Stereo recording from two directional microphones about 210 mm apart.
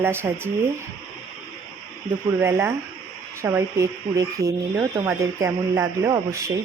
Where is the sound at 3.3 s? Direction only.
10° right (ahead or behind).